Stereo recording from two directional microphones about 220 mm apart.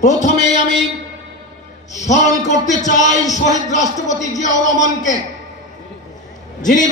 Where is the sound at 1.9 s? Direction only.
30° left (ahead or behind).